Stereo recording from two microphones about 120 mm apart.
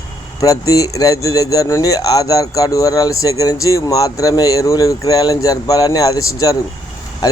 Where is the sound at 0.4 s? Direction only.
30° left (ahead or behind).